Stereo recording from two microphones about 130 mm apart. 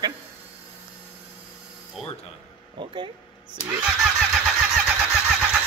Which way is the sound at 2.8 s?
40° right (ahead or behind).